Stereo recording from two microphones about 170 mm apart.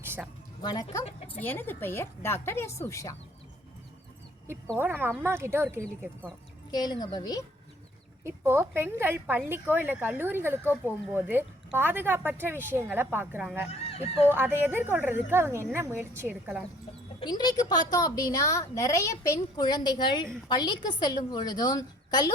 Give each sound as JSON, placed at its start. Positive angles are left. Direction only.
{"t": 0.6, "sound": "a woman's voice", "side_deg": 25}
{"t": 1.4, "sound": "a woman's voice", "side_deg": 10}
{"t": 4.8, "sound": "speech", "side_deg": -10}
{"t": 6.7, "sound": "a woman's voice", "side_deg": 25}
{"t": 8.2, "sound": "speech", "side_deg": -15}
{"t": 13.7, "sound": "goose", "side_deg": 35}
{"t": 14.3, "sound": "speech", "side_deg": -10}
{"t": 17.2, "sound": "a woman's voice", "side_deg": 25}